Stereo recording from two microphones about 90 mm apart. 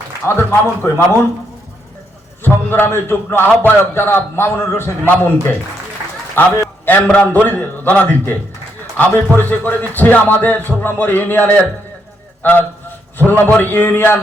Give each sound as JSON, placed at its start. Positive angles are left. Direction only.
{"t": 0.3, "sound": "a man's voice", "side_deg": 25}
{"t": 2.4, "sound": "a man's voice", "side_deg": 25}
{"t": 6.4, "sound": "a man's voice", "side_deg": 25}